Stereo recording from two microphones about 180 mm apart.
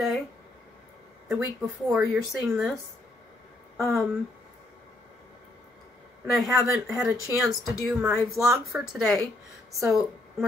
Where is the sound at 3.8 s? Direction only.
Centre (ahead or behind).